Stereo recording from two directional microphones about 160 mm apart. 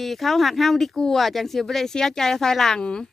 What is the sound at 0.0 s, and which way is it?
Speech, centre (ahead or behind).